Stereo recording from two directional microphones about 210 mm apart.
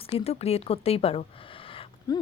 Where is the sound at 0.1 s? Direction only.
30° left (ahead or behind).